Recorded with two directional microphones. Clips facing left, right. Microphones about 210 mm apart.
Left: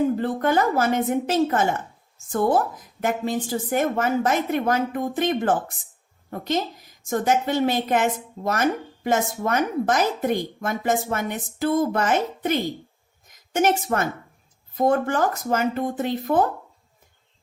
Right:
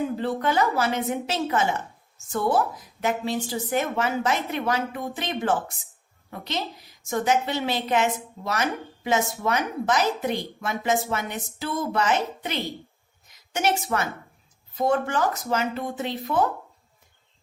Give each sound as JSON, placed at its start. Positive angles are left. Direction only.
{"t": 0.0, "sound": "a woman's voice", "side_deg": 45}